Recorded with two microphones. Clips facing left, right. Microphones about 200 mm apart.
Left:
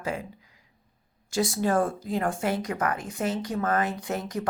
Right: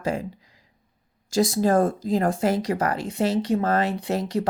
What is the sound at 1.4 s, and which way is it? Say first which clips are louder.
Speech: right 5 dB; 40° right (ahead or behind).